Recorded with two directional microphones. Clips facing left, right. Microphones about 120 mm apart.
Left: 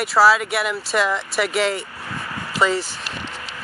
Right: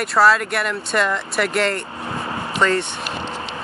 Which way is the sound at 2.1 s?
30° right (ahead or behind).